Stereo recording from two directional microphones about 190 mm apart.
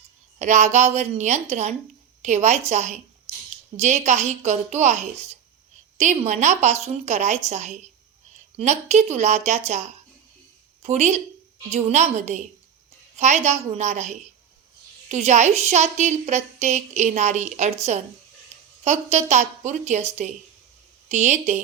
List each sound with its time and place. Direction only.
0.3 s a woman's voice: 40° right (ahead or behind)
18.5 s a sound: 35° right (ahead or behind)
18.9 s a woman's voice: 35° right (ahead or behind)